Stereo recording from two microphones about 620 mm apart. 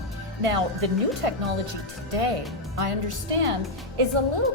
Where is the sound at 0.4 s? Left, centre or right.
Right.